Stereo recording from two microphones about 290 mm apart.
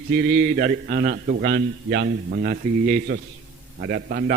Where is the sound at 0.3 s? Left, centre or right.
Right.